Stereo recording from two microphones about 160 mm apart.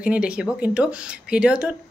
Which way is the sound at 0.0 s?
5° right (ahead or behind).